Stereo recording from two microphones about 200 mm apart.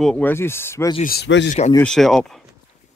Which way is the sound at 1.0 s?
55° left (ahead or behind).